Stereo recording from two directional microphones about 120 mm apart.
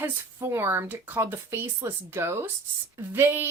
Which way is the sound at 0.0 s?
20° right (ahead or behind).